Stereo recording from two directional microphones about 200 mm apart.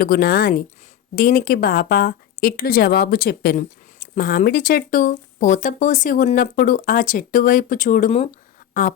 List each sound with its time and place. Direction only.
0.0 s speech: 50° left (ahead or behind)